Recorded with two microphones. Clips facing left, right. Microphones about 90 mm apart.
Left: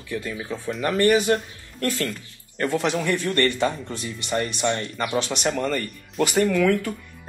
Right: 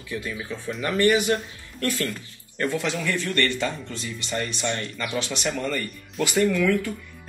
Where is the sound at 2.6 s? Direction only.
40° left (ahead or behind).